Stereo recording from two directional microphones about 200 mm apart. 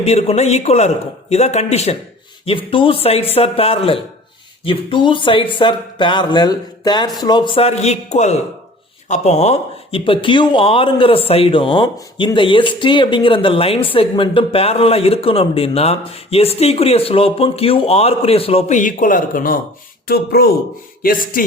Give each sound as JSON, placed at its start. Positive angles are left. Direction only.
{"t": 0.0, "sound": "a man's voice", "side_deg": 30}